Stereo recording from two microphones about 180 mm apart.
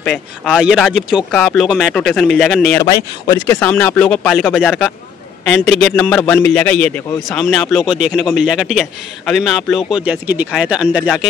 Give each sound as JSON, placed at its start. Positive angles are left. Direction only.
{"t": 0.0, "sound": "a man's voice", "side_deg": 0}
{"t": 2.8, "sound": "a man's voice", "side_deg": 20}